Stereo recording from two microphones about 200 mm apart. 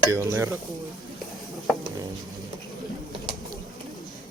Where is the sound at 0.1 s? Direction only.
15° right (ahead or behind).